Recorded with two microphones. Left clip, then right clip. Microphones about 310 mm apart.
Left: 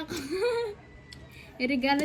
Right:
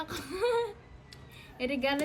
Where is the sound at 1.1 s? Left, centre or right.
Centre.